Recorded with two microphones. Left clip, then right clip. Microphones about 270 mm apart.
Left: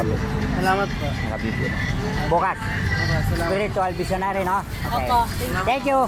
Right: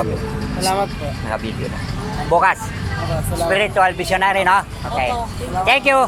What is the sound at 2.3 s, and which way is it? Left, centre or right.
Speech, right.